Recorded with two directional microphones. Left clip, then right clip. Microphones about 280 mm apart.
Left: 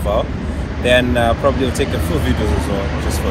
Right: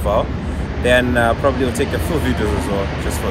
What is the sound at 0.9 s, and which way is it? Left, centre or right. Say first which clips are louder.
Speech: left 1 dB; centre.